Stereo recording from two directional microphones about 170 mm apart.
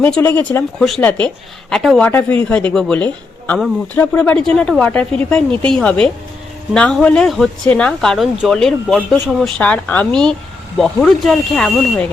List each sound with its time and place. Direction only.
0.0 s speech: 10° left (ahead or behind)